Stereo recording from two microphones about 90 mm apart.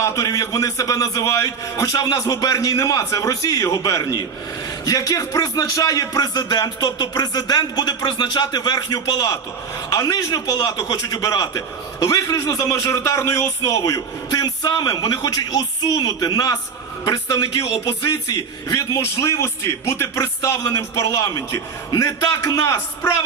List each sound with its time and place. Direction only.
0.0 s a man's voice: 40° left (ahead or behind)